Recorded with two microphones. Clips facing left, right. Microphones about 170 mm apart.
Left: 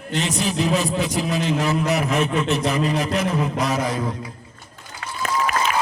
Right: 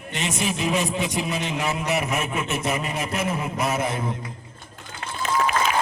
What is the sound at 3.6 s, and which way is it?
Speech, 25° right (ahead or behind).